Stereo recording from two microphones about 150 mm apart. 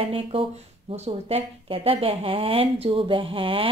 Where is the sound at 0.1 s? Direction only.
40° right (ahead or behind).